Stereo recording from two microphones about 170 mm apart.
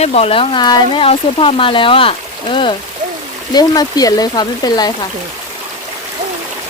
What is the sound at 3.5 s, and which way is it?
Speech, 20° left (ahead or behind).